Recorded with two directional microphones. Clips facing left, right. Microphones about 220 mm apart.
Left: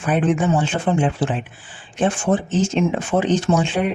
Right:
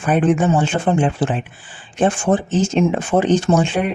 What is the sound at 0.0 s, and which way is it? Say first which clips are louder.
Speech: right 3 dB; 50° right (ahead or behind).